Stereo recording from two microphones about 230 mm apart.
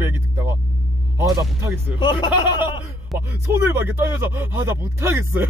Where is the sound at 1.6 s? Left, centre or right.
Centre.